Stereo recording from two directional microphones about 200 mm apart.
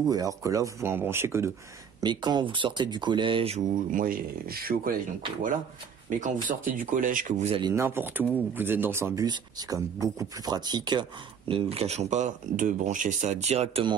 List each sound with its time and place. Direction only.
0.0 s speech: 20° right (ahead or behind); by 4.9 s 50° right (ahead or behind)
6.0 s speech: 40° right (ahead or behind)
7.7 s speech: 10° right (ahead or behind); by 13.9 s 30° right (ahead or behind)